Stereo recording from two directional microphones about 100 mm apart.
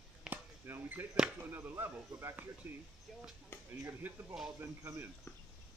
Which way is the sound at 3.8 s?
20° right (ahead or behind).